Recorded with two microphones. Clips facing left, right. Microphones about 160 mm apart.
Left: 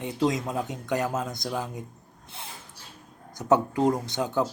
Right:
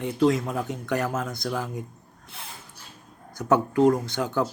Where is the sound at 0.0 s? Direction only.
20° left (ahead or behind).